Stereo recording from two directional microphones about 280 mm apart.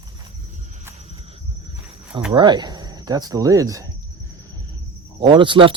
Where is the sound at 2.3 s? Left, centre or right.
Centre.